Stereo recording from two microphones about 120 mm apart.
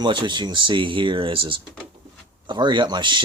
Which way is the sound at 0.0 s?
40° right (ahead or behind).